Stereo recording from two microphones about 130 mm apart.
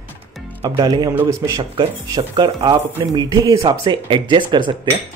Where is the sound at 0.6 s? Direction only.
30° right (ahead or behind).